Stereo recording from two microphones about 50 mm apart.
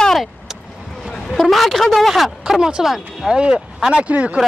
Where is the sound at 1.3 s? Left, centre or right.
Centre.